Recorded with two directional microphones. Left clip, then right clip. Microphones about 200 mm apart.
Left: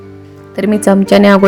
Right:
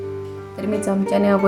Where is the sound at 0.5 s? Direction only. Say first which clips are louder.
Left 11 dB; 40° left (ahead or behind).